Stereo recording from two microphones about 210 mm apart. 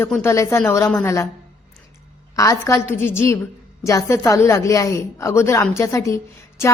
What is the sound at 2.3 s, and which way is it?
A woman's voice, 15° left (ahead or behind).